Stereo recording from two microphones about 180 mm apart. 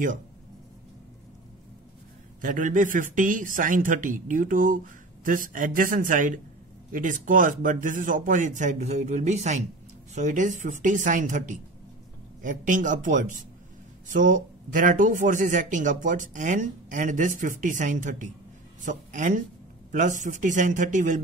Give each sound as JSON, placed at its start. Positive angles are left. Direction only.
{"t": 2.4, "sound": "speech", "side_deg": -45}